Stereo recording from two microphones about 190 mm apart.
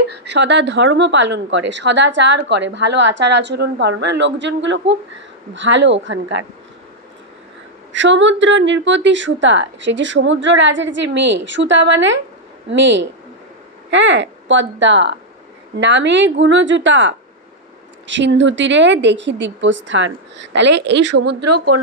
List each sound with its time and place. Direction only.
0.2 s speech: 65° right (ahead or behind)
7.9 s speech: 75° right (ahead or behind)